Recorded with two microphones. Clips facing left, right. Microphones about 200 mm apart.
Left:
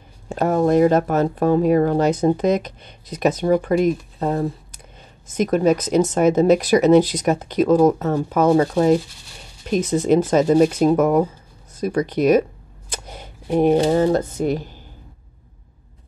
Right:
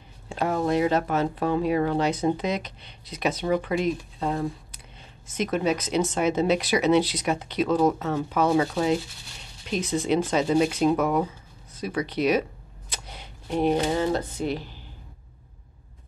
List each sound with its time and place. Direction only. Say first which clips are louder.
0.3 s speech: left 7 dB; 45° left (ahead or behind)
12.9 s shuffling cards: left 6 dB; 45° left (ahead or behind)
13.8 s speech: left 8 dB; 45° left (ahead or behind)